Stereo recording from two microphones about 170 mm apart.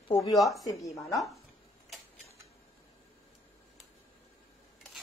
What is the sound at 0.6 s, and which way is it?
Speech, 20° left (ahead or behind).